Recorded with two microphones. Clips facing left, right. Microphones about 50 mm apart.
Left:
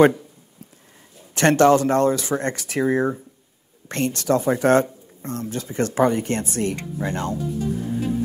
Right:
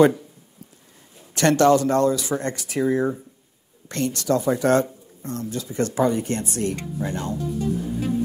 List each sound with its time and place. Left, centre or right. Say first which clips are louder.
1.3 s speech: left 1 dB; left